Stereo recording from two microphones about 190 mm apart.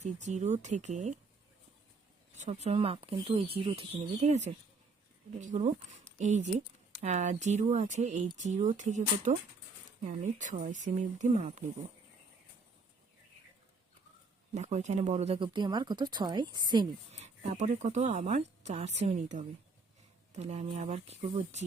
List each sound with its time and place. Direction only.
0.0 s speech: 40° right (ahead or behind)
2.4 s speech: 35° right (ahead or behind)
14.5 s speech: 40° right (ahead or behind); by 17.2 s 25° right (ahead or behind)
17.2 s speech: 40° right (ahead or behind)